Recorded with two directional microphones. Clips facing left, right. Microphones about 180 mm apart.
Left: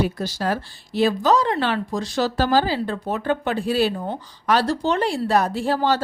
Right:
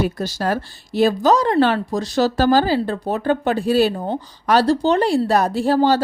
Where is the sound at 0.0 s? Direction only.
45° right (ahead or behind).